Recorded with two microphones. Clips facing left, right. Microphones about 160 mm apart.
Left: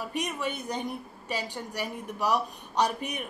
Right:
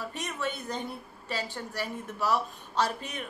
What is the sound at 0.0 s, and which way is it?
A woman's voice, 15° left (ahead or behind).